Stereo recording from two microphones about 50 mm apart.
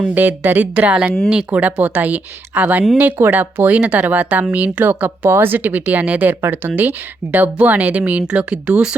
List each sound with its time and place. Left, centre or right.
0.1 s speech: right